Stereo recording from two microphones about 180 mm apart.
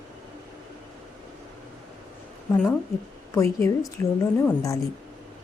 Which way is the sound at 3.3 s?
15° left (ahead or behind).